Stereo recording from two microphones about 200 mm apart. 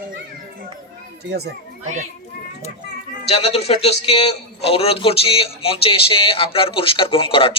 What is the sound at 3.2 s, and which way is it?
A man's voice, 30° left (ahead or behind).